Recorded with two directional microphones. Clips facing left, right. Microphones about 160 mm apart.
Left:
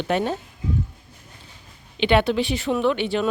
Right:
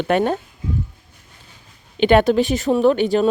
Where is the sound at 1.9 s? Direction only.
45° right (ahead or behind).